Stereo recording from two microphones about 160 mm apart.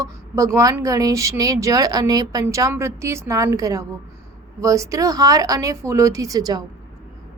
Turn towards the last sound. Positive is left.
turn(degrees=-25)  # may be behind; listen again after turning